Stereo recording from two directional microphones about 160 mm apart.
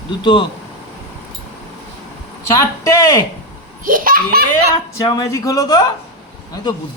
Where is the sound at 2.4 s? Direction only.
20° left (ahead or behind).